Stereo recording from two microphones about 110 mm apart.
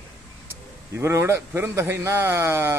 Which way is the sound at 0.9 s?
25° right (ahead or behind).